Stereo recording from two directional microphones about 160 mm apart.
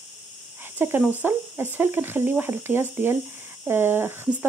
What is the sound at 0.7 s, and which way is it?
Speech, 15° right (ahead or behind).